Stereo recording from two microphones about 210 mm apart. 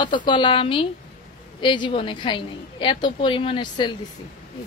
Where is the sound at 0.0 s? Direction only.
20° left (ahead or behind).